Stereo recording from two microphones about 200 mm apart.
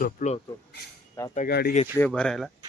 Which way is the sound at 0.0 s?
40° left (ahead or behind).